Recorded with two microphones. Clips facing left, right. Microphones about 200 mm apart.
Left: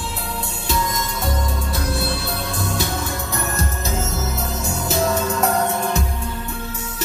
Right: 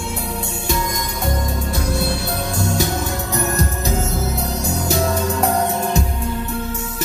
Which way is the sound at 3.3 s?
40° right (ahead or behind).